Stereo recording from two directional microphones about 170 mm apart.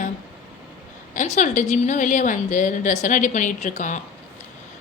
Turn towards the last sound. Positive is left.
turn(degrees=45)  # may be behind; listen again after turning